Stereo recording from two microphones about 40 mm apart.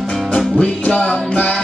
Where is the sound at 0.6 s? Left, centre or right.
Left.